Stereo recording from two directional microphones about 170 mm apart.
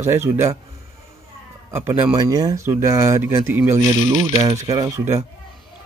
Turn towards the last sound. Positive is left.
turn(degrees=-25)  # may be behind; listen again after turning